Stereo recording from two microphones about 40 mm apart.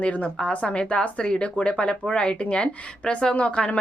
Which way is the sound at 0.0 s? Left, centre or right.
Left.